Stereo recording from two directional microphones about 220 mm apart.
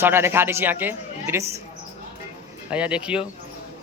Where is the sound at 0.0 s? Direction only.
10° right (ahead or behind).